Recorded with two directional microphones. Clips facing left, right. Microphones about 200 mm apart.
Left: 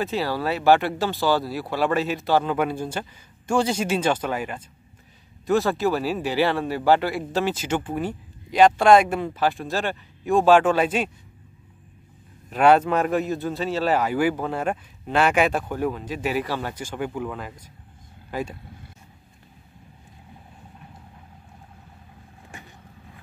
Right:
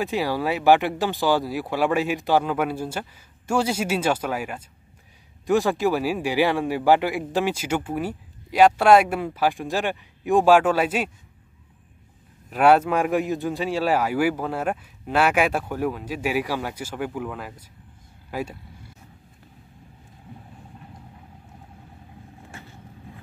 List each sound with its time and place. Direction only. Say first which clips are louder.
0.0 s speech: right 1 dB; 15° right (ahead or behind)
12.4 s speech: even; 5° right (ahead or behind)
22.5 s vehicle: left 1 dB; 15° left (ahead or behind)